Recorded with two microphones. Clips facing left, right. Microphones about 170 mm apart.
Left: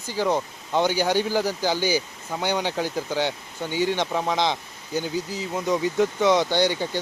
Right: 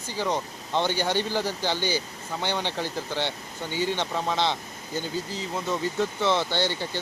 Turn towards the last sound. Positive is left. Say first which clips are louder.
# left 5 dB
turn(degrees=15)  # may be behind; listen again after turning